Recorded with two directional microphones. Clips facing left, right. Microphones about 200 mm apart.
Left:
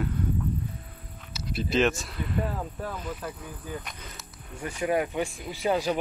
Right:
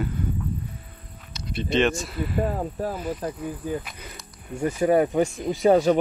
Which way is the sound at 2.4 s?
40° right (ahead or behind).